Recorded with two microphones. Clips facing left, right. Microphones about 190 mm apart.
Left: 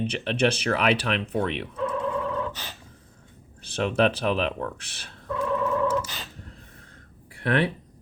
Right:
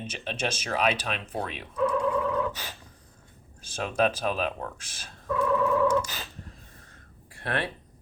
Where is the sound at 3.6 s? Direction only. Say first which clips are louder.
Left 3 dB; 65° left (ahead or behind).